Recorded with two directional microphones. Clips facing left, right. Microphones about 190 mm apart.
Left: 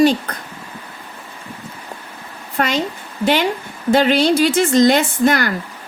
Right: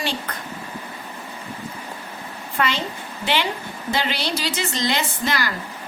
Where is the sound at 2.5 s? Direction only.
40° left (ahead or behind).